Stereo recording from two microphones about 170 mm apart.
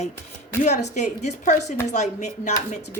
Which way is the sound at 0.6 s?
45° left (ahead or behind).